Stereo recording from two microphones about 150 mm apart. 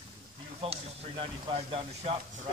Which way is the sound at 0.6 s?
40° right (ahead or behind).